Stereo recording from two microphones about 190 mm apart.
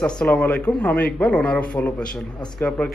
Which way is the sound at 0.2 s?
5° left (ahead or behind).